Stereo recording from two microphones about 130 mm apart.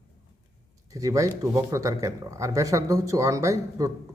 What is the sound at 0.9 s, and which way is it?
Speech, 25° right (ahead or behind).